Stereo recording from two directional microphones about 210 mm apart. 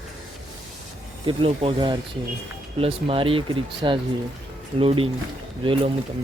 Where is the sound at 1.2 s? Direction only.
25° right (ahead or behind).